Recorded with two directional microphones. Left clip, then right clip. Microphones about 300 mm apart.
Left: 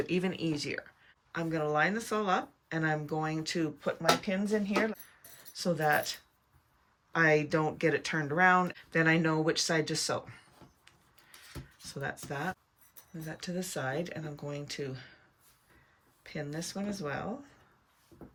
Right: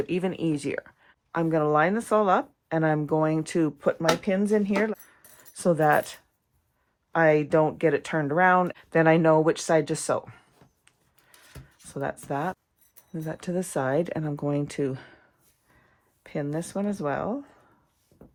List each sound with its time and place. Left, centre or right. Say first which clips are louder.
0.0 s speech: right 5 dB; centre
11.9 s speech: right 8 dB; centre
16.2 s speech: right 8 dB; centre